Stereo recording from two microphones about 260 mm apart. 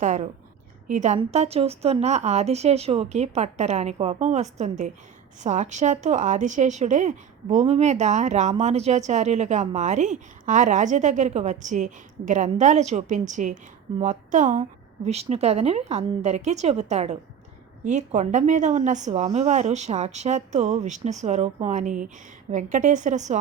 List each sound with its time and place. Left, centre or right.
0.0 s a woman's voice: right